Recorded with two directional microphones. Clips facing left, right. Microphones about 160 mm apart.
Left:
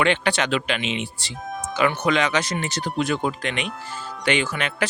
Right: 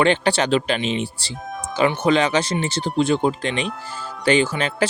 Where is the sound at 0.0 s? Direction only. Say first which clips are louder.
Right 3 dB; 30° right (ahead or behind).